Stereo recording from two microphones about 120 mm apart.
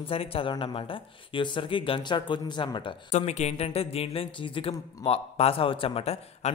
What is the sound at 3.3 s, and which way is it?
Speech, 65° left (ahead or behind).